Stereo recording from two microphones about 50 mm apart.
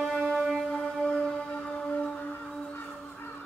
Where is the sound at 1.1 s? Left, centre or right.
Centre.